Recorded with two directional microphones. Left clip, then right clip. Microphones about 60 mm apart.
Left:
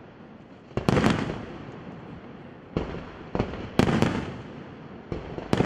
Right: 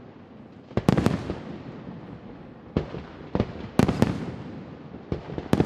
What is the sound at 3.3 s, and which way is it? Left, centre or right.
Fireworks, left.